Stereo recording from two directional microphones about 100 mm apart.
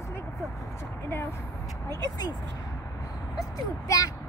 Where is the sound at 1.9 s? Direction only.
40° left (ahead or behind).